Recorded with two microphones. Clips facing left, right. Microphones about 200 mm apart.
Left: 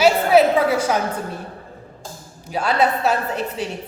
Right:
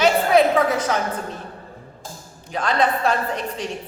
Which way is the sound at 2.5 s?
10° left (ahead or behind).